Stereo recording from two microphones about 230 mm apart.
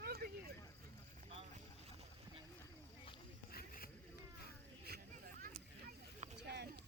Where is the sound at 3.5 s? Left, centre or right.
Left.